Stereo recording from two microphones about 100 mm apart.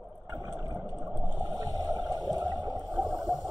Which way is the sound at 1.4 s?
45° right (ahead or behind).